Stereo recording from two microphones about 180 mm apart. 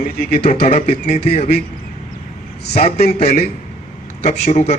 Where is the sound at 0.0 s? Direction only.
50° left (ahead or behind).